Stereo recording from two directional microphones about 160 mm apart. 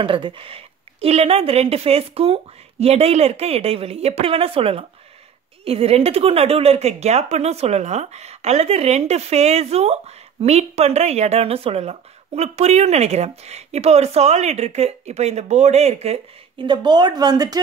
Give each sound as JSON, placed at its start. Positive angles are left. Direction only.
{"t": 0.0, "sound": "a woman's voice", "side_deg": -30}